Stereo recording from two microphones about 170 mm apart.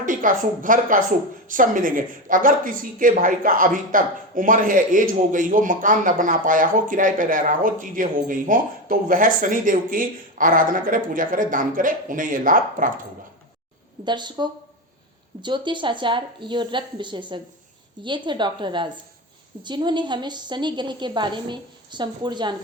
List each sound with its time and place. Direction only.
0.0 s a man's voice: 50° right (ahead or behind)
14.0 s a woman's voice: 25° right (ahead or behind)